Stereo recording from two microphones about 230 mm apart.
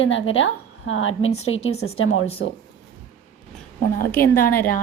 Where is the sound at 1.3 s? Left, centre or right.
Left.